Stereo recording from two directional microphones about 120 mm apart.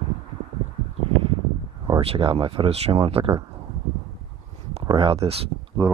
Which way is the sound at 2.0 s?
50° right (ahead or behind).